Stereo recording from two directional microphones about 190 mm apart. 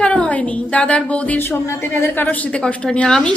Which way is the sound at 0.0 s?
5° left (ahead or behind).